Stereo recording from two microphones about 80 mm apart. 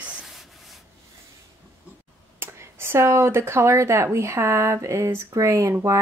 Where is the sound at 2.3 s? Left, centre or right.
Right.